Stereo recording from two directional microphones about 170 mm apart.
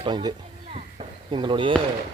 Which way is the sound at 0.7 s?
30° right (ahead or behind).